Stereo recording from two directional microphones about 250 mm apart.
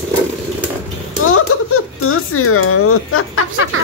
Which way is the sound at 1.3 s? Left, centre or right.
Left.